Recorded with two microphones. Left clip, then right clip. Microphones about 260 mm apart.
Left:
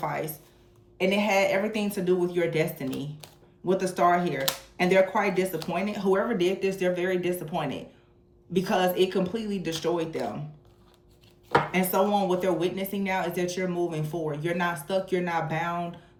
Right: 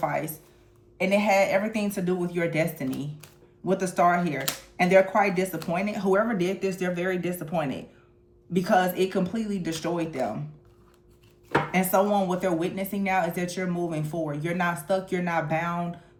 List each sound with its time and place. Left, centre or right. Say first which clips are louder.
0.0 s speech: right 3 dB; right
11.7 s speech: right 2 dB; right